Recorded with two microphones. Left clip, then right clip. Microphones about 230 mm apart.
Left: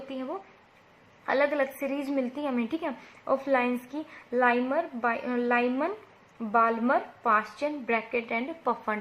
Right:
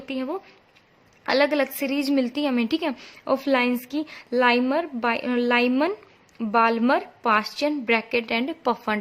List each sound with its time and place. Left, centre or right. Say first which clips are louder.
1.2 s a woman's voice: right 5 dB; right